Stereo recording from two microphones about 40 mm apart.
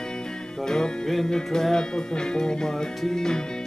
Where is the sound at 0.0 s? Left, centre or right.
Centre.